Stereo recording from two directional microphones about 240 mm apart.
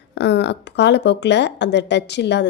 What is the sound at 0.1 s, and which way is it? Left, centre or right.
A woman's voice, left.